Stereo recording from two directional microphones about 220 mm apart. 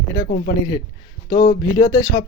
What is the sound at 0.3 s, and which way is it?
Speech, 40° left (ahead or behind).